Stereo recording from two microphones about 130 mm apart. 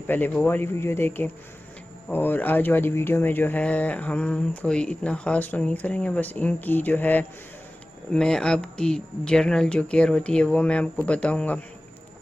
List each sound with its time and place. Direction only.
0.0 s speech: 15° left (ahead or behind)